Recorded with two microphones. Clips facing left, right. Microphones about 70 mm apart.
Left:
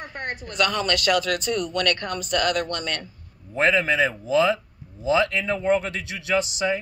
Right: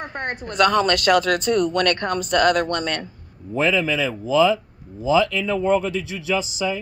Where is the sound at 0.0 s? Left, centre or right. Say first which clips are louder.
Right 4 dB; right.